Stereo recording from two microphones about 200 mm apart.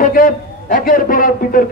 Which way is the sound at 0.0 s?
45° left (ahead or behind).